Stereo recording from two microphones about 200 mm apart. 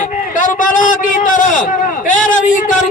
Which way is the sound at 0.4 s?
40° left (ahead or behind).